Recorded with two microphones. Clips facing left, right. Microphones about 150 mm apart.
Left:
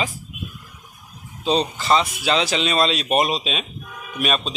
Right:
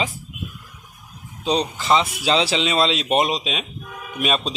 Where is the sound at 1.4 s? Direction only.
15° right (ahead or behind).